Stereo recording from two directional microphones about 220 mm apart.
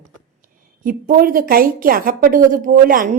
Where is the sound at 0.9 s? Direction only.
40° right (ahead or behind).